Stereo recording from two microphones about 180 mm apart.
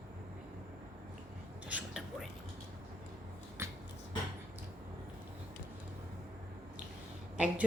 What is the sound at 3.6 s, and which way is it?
Finger snapping, 15° right (ahead or behind).